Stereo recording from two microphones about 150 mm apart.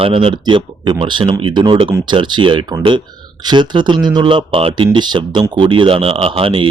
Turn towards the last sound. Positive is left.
turn(degrees=-35)  # may be behind; listen again after turning